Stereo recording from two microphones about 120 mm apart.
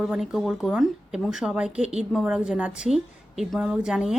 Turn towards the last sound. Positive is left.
turn(degrees=-5)  # may be behind; listen again after turning